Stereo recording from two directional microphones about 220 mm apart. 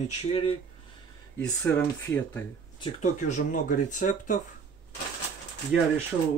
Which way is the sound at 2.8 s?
35° left (ahead or behind).